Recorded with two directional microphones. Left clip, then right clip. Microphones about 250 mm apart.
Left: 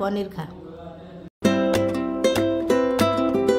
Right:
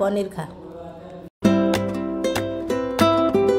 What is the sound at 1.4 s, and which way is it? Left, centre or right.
Music, centre.